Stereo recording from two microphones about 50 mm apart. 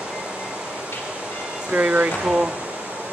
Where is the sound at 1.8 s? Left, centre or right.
Right.